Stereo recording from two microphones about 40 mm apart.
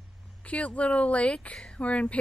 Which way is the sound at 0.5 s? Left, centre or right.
Left.